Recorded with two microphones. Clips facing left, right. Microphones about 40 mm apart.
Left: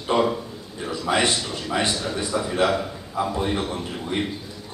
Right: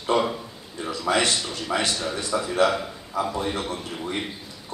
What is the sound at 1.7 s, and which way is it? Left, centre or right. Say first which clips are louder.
A man's voice: left 1 dB; centre.